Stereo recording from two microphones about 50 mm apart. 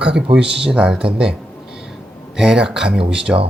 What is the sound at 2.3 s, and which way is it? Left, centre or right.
Speech, centre.